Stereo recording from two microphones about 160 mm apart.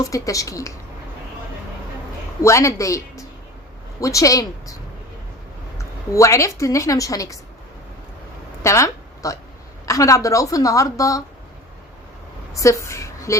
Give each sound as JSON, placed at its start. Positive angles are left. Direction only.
{"t": 0.0, "sound": "a woman's voice", "side_deg": 20}
{"t": 2.4, "sound": "a woman's voice", "side_deg": 20}
{"t": 8.6, "sound": "a woman's voice", "side_deg": 20}
{"t": 12.5, "sound": "a woman's voice", "side_deg": 20}